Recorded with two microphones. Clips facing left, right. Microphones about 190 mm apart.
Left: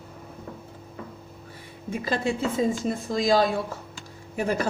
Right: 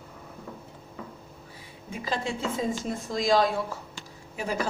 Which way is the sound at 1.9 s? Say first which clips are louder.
Left 4 dB; 55° left (ahead or behind).